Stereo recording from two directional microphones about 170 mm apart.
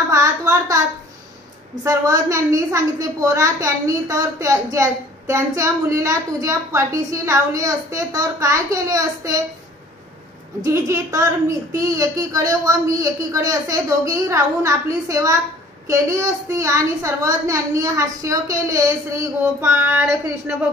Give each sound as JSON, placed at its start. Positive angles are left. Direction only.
{"t": 0.1, "sound": "a sound", "side_deg": -20}
{"t": 1.9, "sound": "a woman's voice", "side_deg": -20}
{"t": 10.6, "sound": "a woman's voice", "side_deg": -15}